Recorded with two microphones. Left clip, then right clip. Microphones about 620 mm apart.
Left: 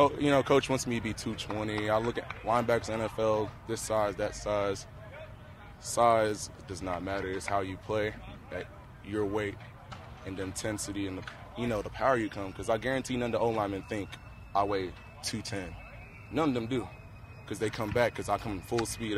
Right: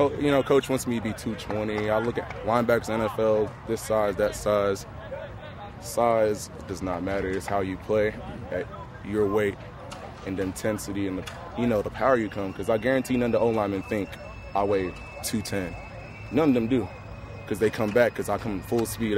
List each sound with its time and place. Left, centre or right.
0.0 s speech: left
5.9 s speech: left
9.1 s speech: left
10.6 s speech: left